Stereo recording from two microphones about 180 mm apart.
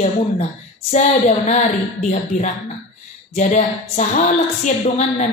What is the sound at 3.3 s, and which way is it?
A woman's voice, 45° left (ahead or behind).